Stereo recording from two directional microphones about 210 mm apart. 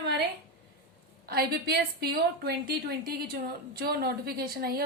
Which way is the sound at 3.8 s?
50° right (ahead or behind).